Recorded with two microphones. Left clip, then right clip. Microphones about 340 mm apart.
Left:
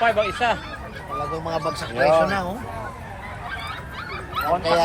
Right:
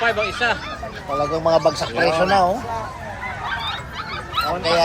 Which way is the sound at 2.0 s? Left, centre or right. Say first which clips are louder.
Right 1 dB; centre.